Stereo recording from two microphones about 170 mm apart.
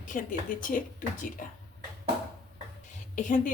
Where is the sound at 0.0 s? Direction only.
50° left (ahead or behind).